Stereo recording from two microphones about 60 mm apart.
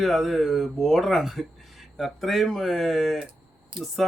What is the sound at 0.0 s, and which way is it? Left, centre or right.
Speech, centre.